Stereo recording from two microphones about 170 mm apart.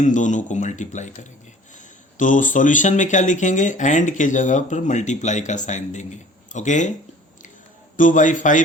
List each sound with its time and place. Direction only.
0.0 s speech: 45° left (ahead or behind)
7.9 s speech: 50° left (ahead or behind)